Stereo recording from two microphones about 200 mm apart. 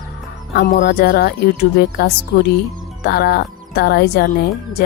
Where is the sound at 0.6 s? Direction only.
50° left (ahead or behind).